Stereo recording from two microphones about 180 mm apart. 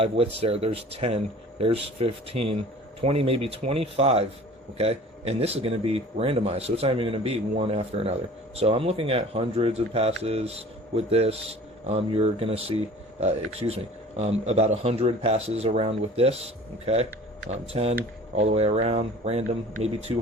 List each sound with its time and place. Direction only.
0.0 s speech: 30° right (ahead or behind)